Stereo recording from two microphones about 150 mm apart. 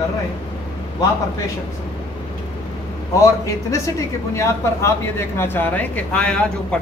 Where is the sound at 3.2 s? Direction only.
20° left (ahead or behind).